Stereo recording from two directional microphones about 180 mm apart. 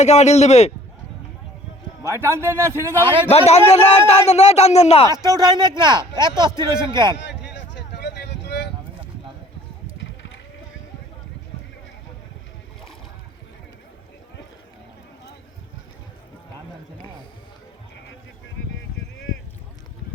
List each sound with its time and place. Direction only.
0.0 s speech: 40° left (ahead or behind)
2.0 s a man's voice: 15° right (ahead or behind)
3.2 s speech: 35° left (ahead or behind)
5.1 s speech: 20° right (ahead or behind)
7.2 s a sound: 70° left (ahead or behind)